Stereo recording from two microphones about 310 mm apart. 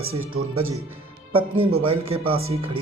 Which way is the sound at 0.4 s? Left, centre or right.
Right.